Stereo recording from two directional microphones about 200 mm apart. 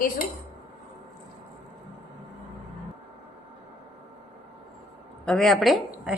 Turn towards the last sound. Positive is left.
turn(degrees=0)  # may be behind; listen again after turning